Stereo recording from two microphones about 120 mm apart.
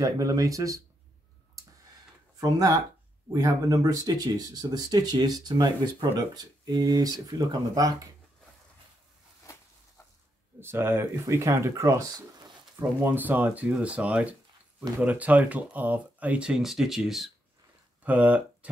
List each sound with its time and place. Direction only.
0.0 s speech: 30° right (ahead or behind)
2.4 s speech: 30° right (ahead or behind)
10.6 s speech: 20° right (ahead or behind)